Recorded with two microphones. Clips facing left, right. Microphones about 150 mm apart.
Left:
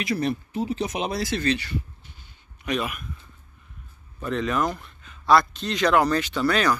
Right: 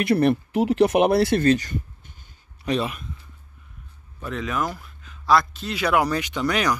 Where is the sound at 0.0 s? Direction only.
65° right (ahead or behind); by 1.8 s 45° right (ahead or behind).